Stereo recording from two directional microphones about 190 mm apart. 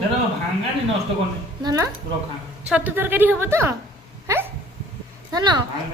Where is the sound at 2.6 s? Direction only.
5° right (ahead or behind).